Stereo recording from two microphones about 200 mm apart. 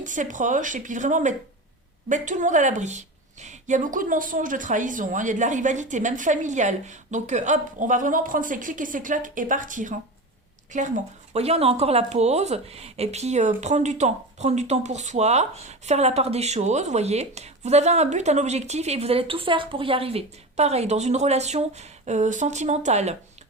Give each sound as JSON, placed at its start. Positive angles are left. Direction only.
{"t": 0.0, "sound": "speech", "side_deg": -40}